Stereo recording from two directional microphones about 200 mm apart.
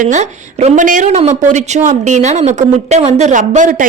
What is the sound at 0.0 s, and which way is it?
A woman's voice, 40° right (ahead or behind).